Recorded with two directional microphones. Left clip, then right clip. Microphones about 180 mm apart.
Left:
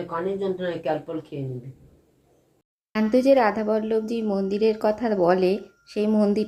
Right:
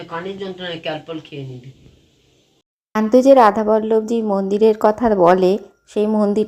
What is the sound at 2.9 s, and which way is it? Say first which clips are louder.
A woman's voice: right 7 dB; 20° right (ahead or behind).